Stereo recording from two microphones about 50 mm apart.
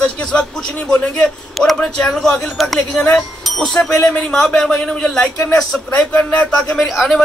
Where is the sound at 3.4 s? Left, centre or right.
Centre.